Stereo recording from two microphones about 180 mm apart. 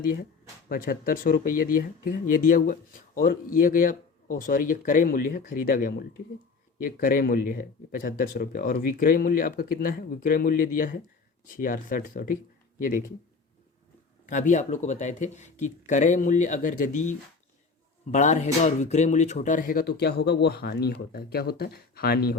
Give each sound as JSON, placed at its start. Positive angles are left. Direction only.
{"t": 0.0, "sound": "speech", "side_deg": 50}
{"t": 14.3, "sound": "speech", "side_deg": 45}